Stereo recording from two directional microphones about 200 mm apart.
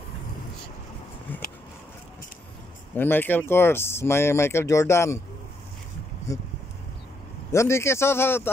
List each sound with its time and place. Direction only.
2.9 s speech: 10° left (ahead or behind)
6.3 s speech: 15° left (ahead or behind)
7.5 s speech: 15° left (ahead or behind)